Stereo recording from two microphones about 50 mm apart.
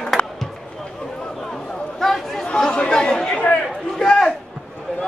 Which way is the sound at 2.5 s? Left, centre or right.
Centre.